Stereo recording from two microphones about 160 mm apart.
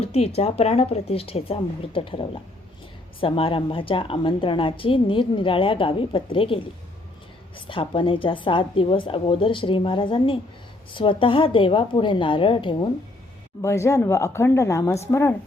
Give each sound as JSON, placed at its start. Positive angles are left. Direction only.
{"t": 0.0, "sound": "a woman's voice", "side_deg": 40}
{"t": 13.6, "sound": "a woman's voice", "side_deg": 20}